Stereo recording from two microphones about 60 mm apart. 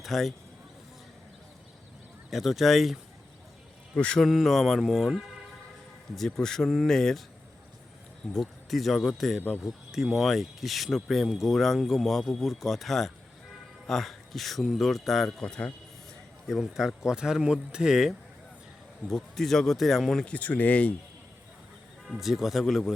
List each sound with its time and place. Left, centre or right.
0.0 s speech: centre
2.3 s speech: centre
3.9 s speech: left
4.3 s speech: centre
8.3 s speech: centre
15.4 s speech: centre
16.5 s speech: centre
19.0 s speech: centre
20.2 s speech: left
22.0 s speech: centre